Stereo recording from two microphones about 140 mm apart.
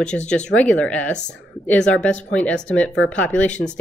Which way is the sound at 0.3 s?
10° left (ahead or behind).